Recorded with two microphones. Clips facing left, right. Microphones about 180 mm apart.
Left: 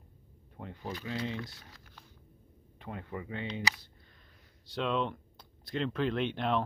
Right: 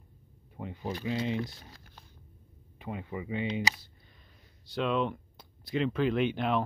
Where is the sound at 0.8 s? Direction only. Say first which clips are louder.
Right 5 dB; 25° right (ahead or behind).